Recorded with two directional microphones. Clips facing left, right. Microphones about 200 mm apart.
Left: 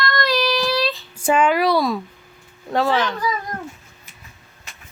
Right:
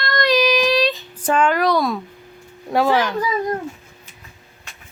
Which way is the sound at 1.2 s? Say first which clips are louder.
Left 1 dB; 10° left (ahead or behind).